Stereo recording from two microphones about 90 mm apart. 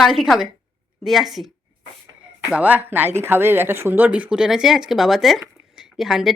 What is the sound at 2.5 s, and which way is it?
Speech, 15° right (ahead or behind).